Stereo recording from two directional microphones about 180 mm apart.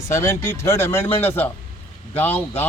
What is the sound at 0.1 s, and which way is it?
Speech, 15° left (ahead or behind).